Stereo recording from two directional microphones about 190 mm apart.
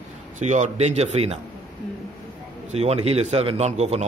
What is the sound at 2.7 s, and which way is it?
A man's voice, 35° right (ahead or behind).